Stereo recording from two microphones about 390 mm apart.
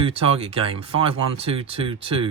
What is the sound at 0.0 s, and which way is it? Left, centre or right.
Speech, centre.